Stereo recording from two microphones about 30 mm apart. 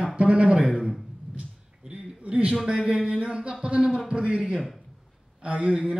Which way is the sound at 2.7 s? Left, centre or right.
Right.